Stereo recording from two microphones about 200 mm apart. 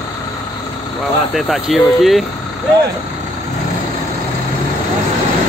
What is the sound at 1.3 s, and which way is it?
Speech, centre (ahead or behind).